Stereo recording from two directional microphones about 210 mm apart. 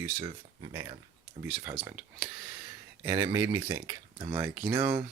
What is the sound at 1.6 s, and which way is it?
Speech, 10° right (ahead or behind).